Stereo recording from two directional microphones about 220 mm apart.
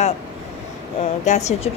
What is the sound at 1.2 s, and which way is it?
Speech, 30° left (ahead or behind).